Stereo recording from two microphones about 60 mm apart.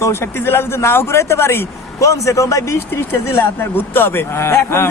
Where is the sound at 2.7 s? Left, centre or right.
Left.